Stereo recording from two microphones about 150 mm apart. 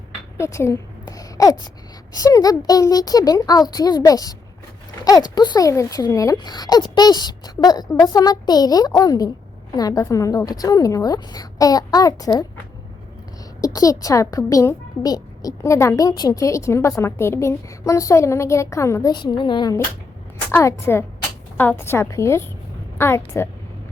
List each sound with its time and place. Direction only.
0.3 s a sound: 20° left (ahead or behind)
2.1 s a child's voice: 25° left (ahead or behind)
13.6 s a child's voice: 25° left (ahead or behind)
19.1 s a woman's voice: 30° left (ahead or behind)
20.5 s a woman's voice: 15° left (ahead or behind)